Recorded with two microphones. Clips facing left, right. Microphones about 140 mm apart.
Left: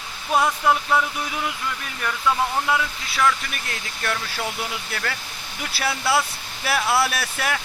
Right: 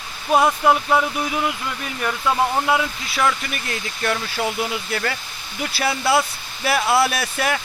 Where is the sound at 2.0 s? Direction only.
25° right (ahead or behind).